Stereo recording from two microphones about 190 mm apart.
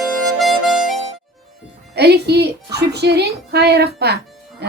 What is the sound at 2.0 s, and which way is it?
A woman's voice, 60° right (ahead or behind).